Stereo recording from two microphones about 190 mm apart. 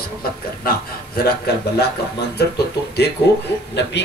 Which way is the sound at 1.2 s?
60° left (ahead or behind).